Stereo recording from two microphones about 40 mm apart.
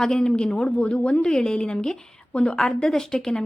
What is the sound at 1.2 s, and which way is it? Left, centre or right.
A woman's voice, centre.